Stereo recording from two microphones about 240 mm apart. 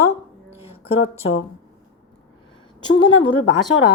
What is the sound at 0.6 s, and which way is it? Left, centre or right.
Speech, left.